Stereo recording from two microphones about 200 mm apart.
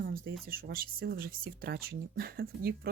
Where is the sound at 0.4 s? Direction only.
45° right (ahead or behind).